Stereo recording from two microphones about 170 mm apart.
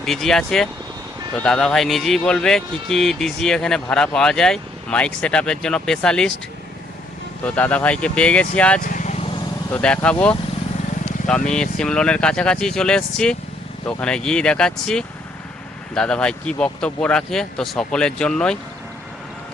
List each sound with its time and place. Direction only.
0.0 s speech: centre (ahead or behind)
7.4 s speech: 5° left (ahead or behind)
8.8 s vehicle: 50° left (ahead or behind)
9.6 s speech: 10° left (ahead or behind)